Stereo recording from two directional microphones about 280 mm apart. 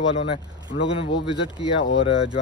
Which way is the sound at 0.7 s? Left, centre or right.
Left.